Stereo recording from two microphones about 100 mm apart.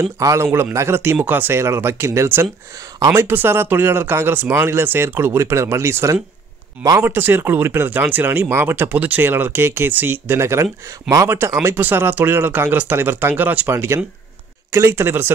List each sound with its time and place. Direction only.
0.2 s speech: 30° right (ahead or behind)
3.0 s speech: 35° right (ahead or behind)
3.3 s speech: 25° right (ahead or behind)